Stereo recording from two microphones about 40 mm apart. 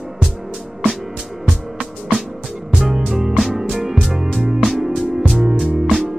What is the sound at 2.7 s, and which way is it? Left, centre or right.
Music, centre.